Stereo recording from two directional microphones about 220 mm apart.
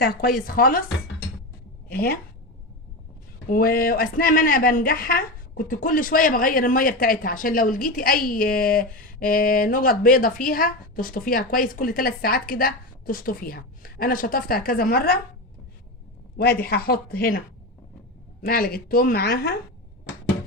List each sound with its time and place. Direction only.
0.0 s speech: 40° left (ahead or behind)
1.9 s speech: 45° left (ahead or behind)
3.5 s speech: 40° left (ahead or behind)
16.4 s speech: 45° left (ahead or behind)
18.4 s speech: 40° left (ahead or behind)